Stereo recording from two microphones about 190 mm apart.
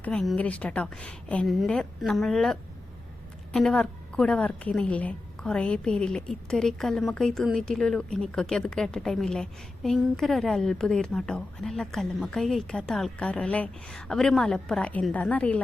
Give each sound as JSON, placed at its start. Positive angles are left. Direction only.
{"t": 0.0, "sound": "a woman's voice", "side_deg": 5}